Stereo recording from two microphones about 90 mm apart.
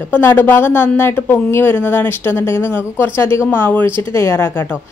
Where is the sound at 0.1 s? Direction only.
25° left (ahead or behind).